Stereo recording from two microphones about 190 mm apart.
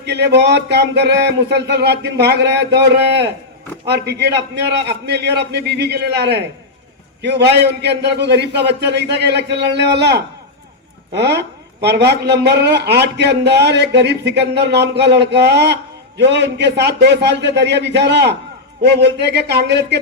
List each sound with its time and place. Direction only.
0.0 s a man's voice: 60° right (ahead or behind)